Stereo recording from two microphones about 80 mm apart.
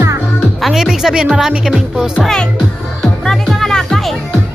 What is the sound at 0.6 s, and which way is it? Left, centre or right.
A woman's voice, centre.